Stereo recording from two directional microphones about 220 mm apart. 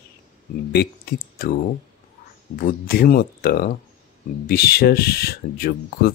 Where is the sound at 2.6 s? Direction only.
40° left (ahead or behind).